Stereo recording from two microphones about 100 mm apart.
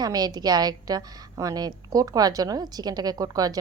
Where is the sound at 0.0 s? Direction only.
40° right (ahead or behind).